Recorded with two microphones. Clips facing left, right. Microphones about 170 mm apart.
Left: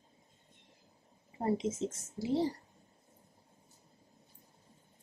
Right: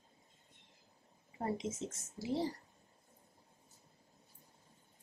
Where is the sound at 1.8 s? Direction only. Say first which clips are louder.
Left 7 dB; 25° left (ahead or behind).